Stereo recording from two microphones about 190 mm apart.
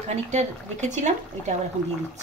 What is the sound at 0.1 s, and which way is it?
Speech, 35° right (ahead or behind).